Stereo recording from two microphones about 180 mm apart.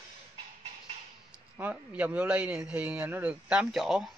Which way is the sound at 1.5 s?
10° right (ahead or behind).